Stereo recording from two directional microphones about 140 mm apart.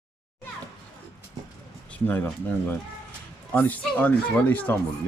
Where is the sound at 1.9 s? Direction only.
10° left (ahead or behind).